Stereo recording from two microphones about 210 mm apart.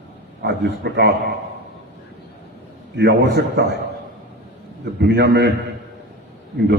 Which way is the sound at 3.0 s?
50° right (ahead or behind).